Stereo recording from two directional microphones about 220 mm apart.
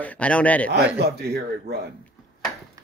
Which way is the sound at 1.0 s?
45° right (ahead or behind).